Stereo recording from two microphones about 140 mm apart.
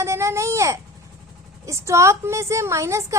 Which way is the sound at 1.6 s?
20° right (ahead or behind).